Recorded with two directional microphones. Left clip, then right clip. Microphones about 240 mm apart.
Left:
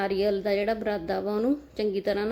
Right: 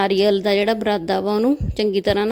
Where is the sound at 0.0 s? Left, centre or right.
Right.